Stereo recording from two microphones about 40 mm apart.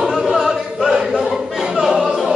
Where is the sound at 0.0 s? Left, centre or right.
Centre.